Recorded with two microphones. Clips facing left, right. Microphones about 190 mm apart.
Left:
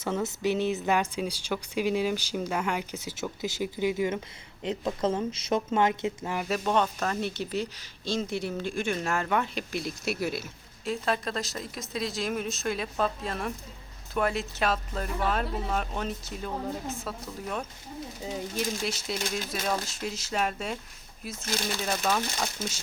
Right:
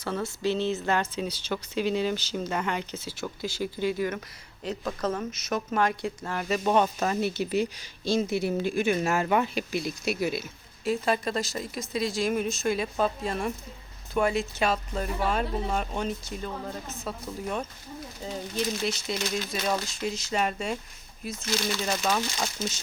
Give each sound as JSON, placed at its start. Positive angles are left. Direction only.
{"t": 0.0, "sound": "speech", "side_deg": 20}
{"t": 6.7, "sound": "speech", "side_deg": -10}
{"t": 18.2, "sound": "speech", "side_deg": 10}